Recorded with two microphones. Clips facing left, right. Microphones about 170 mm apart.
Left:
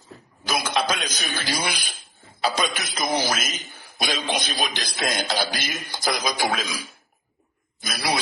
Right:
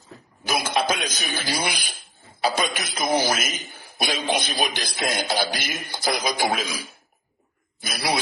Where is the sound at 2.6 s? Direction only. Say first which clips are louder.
Even; 55° right (ahead or behind).